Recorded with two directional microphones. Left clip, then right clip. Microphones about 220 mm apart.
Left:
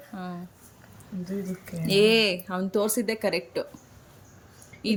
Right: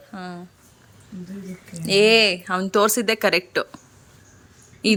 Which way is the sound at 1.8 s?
Centre (ahead or behind).